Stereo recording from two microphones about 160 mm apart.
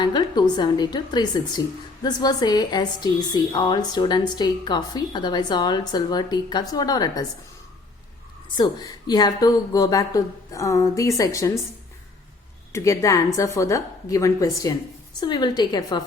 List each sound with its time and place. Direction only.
0.0 s a woman's voice: 30° left (ahead or behind)
8.5 s a woman's voice: 25° left (ahead or behind)
12.7 s a woman's voice: 20° left (ahead or behind)